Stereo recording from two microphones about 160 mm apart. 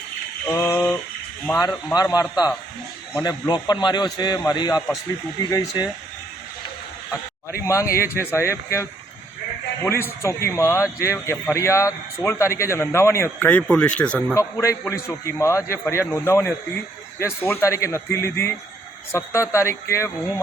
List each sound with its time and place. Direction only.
0.4 s a sound: 15° left (ahead or behind)
1.6 s a man's voice: 20° left (ahead or behind)
7.6 s a man's voice: 20° left (ahead or behind)
14.3 s a man's voice: 20° left (ahead or behind)